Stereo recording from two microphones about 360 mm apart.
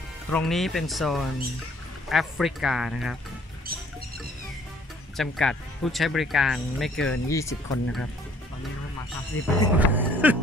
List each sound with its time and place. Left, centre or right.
0.3 s speech: centre
5.1 s speech: centre
9.3 s speech: left
9.8 s speech: centre